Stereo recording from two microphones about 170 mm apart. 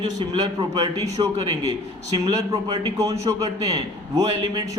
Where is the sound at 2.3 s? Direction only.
20° right (ahead or behind).